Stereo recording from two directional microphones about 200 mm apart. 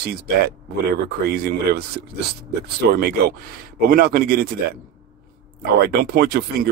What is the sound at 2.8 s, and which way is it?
Speech, 55° right (ahead or behind).